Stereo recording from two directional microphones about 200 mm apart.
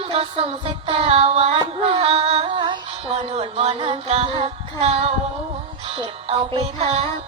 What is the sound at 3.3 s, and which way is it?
Child singing, 25° right (ahead or behind).